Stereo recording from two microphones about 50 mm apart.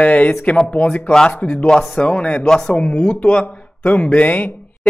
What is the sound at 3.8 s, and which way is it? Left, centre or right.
Speech, left.